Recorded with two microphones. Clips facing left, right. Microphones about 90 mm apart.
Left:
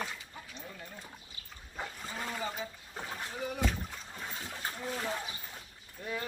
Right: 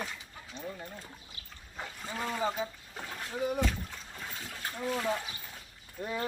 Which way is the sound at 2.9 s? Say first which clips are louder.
Left 1 dB; 10° left (ahead or behind).